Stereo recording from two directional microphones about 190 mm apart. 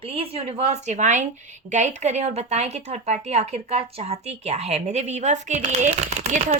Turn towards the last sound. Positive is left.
turn(degrees=-35)  # may be behind; listen again after turning